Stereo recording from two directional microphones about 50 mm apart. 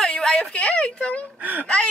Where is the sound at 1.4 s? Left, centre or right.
Right.